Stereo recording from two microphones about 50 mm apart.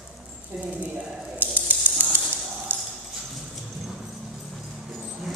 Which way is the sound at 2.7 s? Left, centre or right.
Right.